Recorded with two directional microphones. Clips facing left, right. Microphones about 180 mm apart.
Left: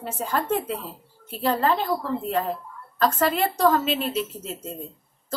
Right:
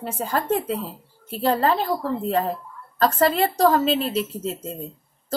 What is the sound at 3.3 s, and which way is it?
Speech, 35° right (ahead or behind).